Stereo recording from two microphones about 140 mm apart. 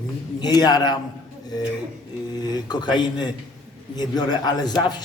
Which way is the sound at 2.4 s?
30° left (ahead or behind).